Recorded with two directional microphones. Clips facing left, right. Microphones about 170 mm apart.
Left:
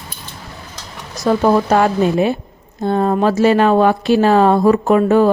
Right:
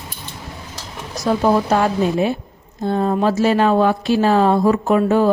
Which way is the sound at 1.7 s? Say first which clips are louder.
Left 3 dB; 65° left (ahead or behind).